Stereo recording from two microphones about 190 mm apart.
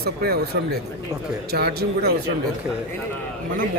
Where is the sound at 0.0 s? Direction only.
55° right (ahead or behind).